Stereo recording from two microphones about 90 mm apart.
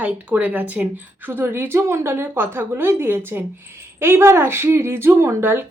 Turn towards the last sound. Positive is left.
turn(degrees=-25)  # may be behind; listen again after turning